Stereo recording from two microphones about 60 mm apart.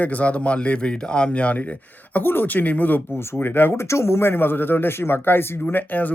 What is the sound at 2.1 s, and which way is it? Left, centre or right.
Speech, left.